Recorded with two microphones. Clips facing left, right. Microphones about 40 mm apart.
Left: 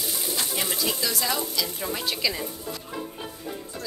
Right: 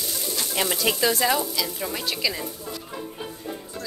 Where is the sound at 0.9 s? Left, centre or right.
Right.